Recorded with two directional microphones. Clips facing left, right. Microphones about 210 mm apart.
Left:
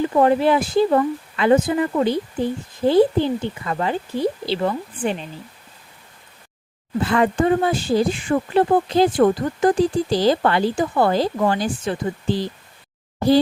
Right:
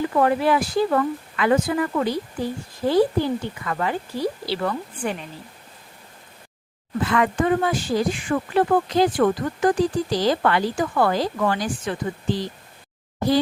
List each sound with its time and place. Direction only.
0.0 s speech: 25° left (ahead or behind)
7.0 s speech: 30° left (ahead or behind)